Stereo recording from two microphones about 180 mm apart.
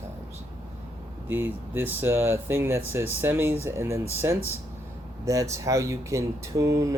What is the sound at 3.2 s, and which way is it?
Speech, 10° right (ahead or behind).